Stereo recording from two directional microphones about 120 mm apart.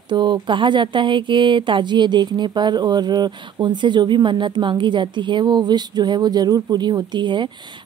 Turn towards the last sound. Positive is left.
turn(degrees=-40)  # may be behind; listen again after turning